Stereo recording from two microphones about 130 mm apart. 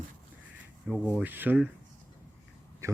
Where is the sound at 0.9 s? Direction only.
10° right (ahead or behind).